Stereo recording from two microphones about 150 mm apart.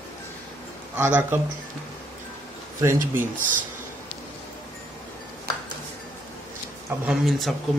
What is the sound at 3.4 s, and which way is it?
Speech, 60° right (ahead or behind).